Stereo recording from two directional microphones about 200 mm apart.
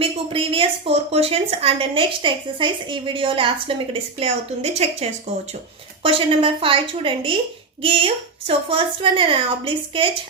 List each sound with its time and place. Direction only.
0.0 s a woman's voice: 25° right (ahead or behind)